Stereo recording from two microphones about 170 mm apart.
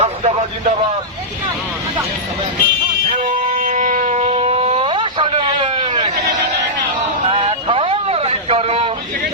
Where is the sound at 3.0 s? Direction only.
45° right (ahead or behind).